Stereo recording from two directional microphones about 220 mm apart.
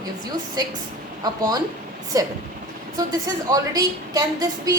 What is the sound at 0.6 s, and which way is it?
A woman's voice, 15° right (ahead or behind).